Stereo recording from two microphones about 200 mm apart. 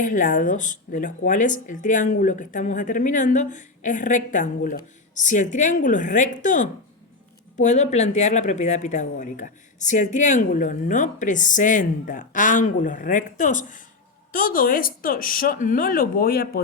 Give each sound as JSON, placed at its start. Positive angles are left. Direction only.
{"t": 0.0, "sound": "speech", "side_deg": 40}